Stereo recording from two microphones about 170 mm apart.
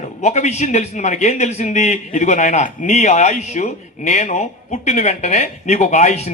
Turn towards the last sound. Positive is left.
turn(degrees=40)  # may be behind; listen again after turning